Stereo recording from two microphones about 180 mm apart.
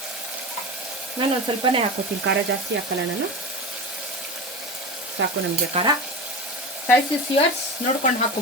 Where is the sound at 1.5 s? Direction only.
25° right (ahead or behind).